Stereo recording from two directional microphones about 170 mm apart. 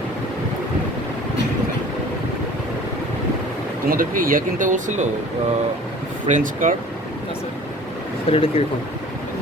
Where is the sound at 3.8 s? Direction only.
55° right (ahead or behind).